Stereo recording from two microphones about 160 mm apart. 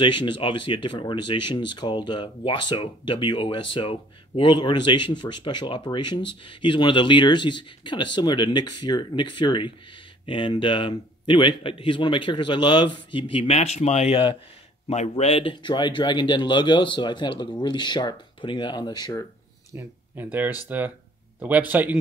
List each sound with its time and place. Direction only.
0.0 s a man's voice: 30° left (ahead or behind)
19.7 s a man's voice: 15° right (ahead or behind)